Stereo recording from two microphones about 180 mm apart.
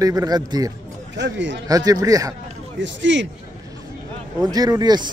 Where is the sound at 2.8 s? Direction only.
90° right.